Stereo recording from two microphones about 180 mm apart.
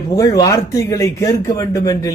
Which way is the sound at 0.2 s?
20° left (ahead or behind).